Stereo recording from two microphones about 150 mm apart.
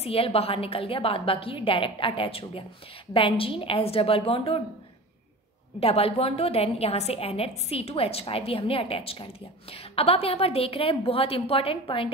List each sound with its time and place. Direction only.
0.0 s a woman's voice: 40° left (ahead or behind)
5.8 s a woman's voice: 40° left (ahead or behind)